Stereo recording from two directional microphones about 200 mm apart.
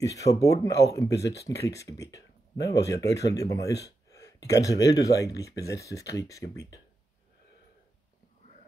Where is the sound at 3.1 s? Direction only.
60° left (ahead or behind).